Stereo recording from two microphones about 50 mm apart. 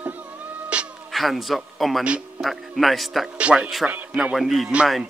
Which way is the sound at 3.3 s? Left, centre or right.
Right.